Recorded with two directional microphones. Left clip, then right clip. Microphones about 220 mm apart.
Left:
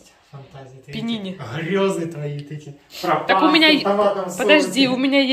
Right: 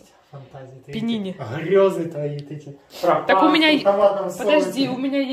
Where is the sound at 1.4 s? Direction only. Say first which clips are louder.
Right 5 dB; 45° right (ahead or behind).